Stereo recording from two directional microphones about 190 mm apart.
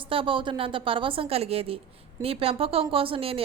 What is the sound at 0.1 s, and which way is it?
A woman's voice, 25° right (ahead or behind).